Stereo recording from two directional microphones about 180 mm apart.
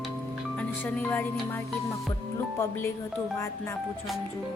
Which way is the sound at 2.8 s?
15° left (ahead or behind).